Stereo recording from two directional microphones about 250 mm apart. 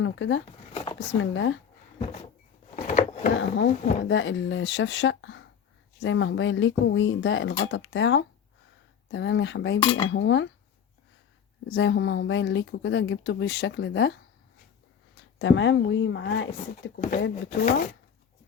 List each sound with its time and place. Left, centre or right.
0.0 s speech: left
0.7 s a sound: left
1.2 s speech: left
2.7 s a sound: left
3.3 s speech: left
9.8 s cutlery: centre
10.1 s speech: left
11.7 s speech: left
15.4 s speech: left